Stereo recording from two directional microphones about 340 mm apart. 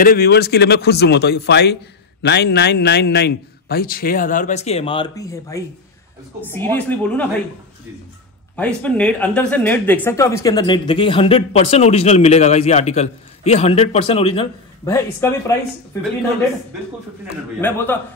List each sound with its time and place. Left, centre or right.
0.0 s a man's voice: left; by 7.2 s centre
8.5 s speech: centre
17.6 s a woman's voice: centre